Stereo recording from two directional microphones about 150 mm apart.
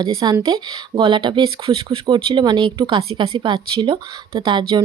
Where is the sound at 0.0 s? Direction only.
30° right (ahead or behind).